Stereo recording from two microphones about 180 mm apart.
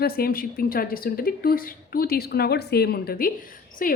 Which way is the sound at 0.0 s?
55° left (ahead or behind).